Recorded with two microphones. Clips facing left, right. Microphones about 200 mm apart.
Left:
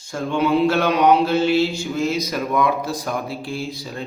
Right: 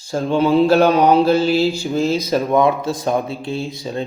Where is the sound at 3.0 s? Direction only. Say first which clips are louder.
Right 6 dB; 20° right (ahead or behind).